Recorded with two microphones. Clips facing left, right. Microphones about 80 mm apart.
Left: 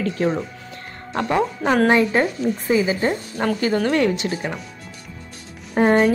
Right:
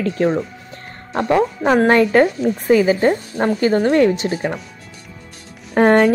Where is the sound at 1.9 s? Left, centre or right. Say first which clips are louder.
Right 4 dB; right.